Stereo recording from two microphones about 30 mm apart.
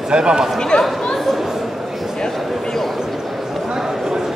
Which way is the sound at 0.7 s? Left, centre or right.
Left.